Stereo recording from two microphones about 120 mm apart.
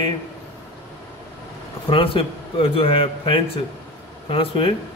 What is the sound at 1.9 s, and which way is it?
A man's voice, 50° left (ahead or behind).